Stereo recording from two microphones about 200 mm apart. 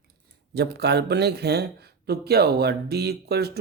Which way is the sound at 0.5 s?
55° right (ahead or behind).